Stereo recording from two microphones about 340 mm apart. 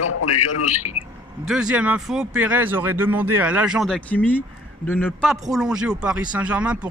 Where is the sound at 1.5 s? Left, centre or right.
Centre.